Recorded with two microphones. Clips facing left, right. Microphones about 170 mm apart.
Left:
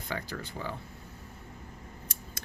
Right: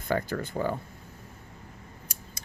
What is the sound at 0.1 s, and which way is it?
Speech, 50° right (ahead or behind).